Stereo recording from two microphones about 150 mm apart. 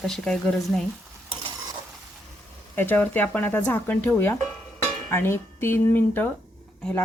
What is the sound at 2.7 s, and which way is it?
Speech, 15° left (ahead or behind).